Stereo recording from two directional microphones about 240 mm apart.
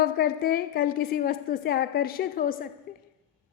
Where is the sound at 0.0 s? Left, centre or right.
Left.